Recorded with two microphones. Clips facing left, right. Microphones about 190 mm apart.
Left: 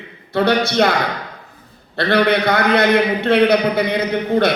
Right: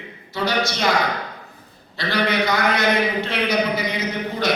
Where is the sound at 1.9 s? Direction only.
60° left (ahead or behind).